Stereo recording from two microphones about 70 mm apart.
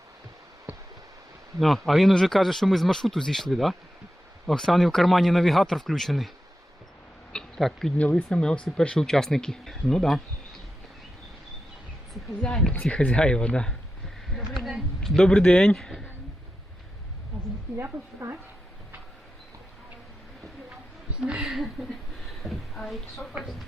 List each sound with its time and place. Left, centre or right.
1.5 s speech: centre
7.3 s a sound: centre
8.1 s speech: centre
12.4 s speech: centre
14.3 s a sound: centre
15.1 s speech: centre
18.2 s a woman's voice: right
21.2 s speech: centre